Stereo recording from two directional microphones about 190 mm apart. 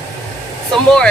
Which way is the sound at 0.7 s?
5° left (ahead or behind).